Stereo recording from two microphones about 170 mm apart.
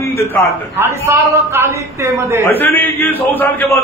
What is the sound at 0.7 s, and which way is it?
Speech, 15° right (ahead or behind).